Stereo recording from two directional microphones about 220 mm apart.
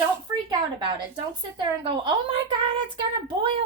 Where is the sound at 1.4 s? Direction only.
20° right (ahead or behind).